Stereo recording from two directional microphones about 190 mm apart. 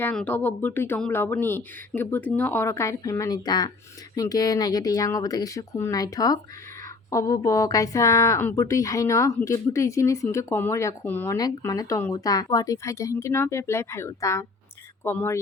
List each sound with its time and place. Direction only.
0.0 s a woman's voice: 5° left (ahead or behind)